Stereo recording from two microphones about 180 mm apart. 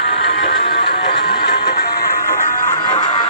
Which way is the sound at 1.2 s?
65° left (ahead or behind).